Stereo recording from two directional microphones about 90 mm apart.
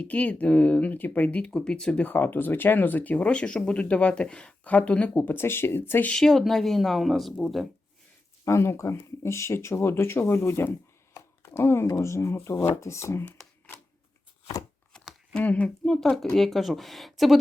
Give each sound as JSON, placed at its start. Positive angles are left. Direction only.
{"t": 0.0, "sound": "speech", "side_deg": 15}
{"t": 6.1, "sound": "speech", "side_deg": 5}
{"t": 8.4, "sound": "speech", "side_deg": 30}
{"t": 11.1, "sound": "a sound", "side_deg": 30}
{"t": 11.9, "sound": "speech", "side_deg": 30}
{"t": 14.9, "sound": "a sound", "side_deg": 0}
{"t": 15.4, "sound": "speech", "side_deg": 15}
{"t": 15.8, "sound": "speech", "side_deg": 5}